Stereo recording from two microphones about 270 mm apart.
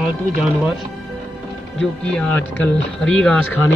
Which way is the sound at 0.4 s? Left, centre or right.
Centre.